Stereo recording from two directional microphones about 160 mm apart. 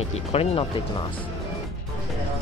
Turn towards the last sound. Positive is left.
turn(degrees=35)  # may be behind; listen again after turning